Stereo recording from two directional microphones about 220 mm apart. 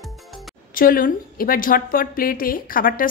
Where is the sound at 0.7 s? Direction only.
40° left (ahead or behind).